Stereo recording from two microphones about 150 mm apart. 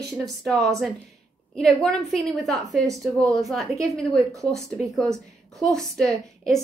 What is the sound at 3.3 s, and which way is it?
A woman's voice, centre (ahead or behind).